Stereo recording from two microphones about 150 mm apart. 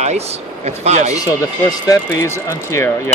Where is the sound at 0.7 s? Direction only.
50° right (ahead or behind).